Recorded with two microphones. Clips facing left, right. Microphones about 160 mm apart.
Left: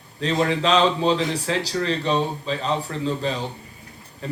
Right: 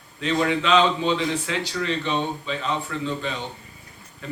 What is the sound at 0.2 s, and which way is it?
Speech, 35° left (ahead or behind).